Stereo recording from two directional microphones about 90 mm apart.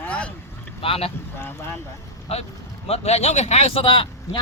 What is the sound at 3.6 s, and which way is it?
Speech, 90° left.